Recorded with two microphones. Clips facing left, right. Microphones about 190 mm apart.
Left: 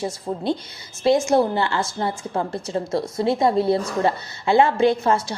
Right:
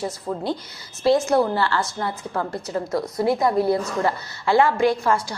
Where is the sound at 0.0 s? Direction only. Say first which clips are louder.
Left 1 dB; 25° left (ahead or behind).